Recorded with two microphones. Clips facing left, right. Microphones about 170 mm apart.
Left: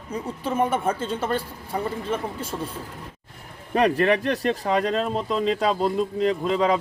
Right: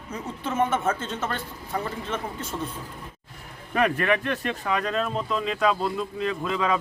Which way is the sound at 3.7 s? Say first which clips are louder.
Left 3 dB; 35° left (ahead or behind).